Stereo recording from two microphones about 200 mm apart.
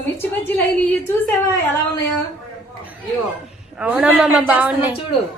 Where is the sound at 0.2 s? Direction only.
10° left (ahead or behind).